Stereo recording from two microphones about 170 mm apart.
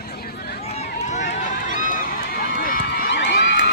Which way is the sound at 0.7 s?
40° left (ahead or behind).